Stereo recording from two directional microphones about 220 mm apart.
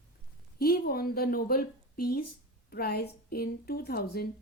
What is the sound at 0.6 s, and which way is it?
A woman's voice, 45° left (ahead or behind).